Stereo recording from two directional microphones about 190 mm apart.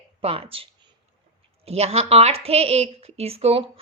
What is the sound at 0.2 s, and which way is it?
A woman's voice, 30° right (ahead or behind).